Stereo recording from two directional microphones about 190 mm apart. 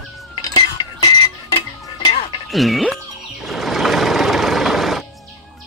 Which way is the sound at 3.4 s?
Centre (ahead or behind).